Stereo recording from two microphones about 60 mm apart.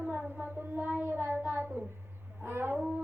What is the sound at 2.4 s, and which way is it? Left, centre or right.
Child singing, right.